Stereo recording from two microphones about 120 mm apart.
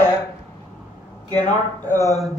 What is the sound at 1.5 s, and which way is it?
Speech, 20° left (ahead or behind).